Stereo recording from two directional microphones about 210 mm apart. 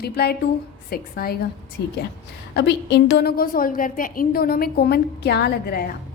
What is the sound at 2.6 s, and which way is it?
A woman's voice, 55° left (ahead or behind).